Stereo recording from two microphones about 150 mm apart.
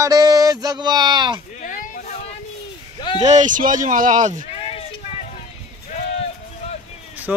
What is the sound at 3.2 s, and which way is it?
Speech, 50° right (ahead or behind).